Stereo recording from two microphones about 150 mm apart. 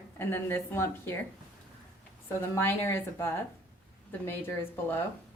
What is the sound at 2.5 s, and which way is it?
A woman's voice, 15° left (ahead or behind).